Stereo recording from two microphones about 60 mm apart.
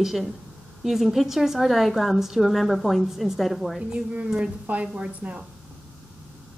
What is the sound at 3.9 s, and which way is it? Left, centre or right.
A woman's voice, centre.